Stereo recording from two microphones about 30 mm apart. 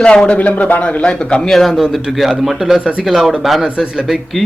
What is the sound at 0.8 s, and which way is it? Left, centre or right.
Speech, left.